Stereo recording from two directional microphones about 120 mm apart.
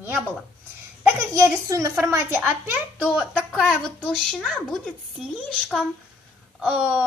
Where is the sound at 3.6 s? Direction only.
Centre (ahead or behind).